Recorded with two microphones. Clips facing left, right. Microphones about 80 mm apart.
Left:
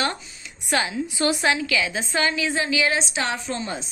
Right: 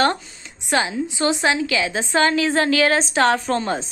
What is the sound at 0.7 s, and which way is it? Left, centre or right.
A woman's voice, right.